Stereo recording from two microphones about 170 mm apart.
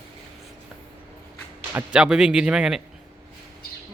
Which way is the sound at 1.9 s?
5° right (ahead or behind).